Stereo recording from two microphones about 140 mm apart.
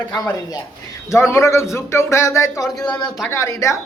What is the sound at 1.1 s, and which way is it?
A man's voice, 20° left (ahead or behind).